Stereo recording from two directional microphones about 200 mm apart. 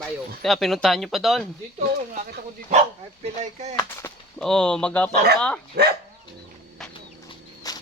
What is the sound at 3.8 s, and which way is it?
Speech, 15° left (ahead or behind).